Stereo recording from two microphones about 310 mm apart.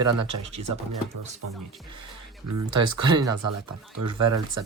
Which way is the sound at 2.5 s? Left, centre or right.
Right.